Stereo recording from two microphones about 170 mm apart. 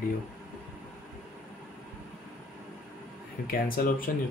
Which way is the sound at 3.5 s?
55° left (ahead or behind).